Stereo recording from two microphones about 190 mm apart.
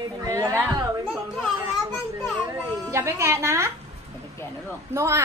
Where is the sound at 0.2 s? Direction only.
15° right (ahead or behind).